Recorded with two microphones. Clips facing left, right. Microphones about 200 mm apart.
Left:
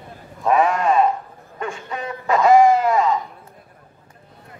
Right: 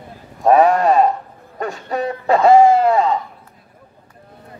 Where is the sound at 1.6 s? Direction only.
40° right (ahead or behind).